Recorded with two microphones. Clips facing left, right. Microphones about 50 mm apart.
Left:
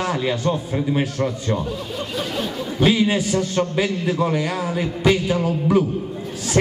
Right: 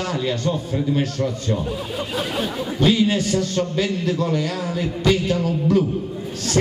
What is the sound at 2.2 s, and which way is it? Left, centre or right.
Speech, right.